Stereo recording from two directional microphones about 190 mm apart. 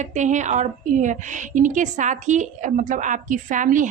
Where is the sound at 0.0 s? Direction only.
40° right (ahead or behind).